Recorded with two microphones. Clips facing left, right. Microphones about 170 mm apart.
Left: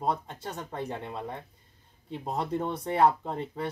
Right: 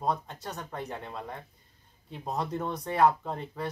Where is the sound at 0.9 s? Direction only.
15° left (ahead or behind).